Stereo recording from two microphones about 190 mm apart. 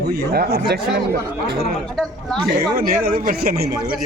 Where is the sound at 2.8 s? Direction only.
50° right (ahead or behind).